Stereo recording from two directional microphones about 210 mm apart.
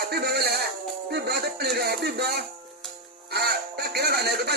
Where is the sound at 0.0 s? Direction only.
50° right (ahead or behind).